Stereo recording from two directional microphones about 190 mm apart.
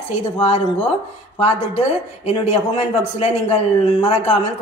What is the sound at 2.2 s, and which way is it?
A man's voice, 35° left (ahead or behind).